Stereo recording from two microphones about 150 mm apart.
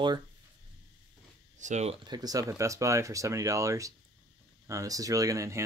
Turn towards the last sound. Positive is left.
turn(degrees=-20)  # may be behind; listen again after turning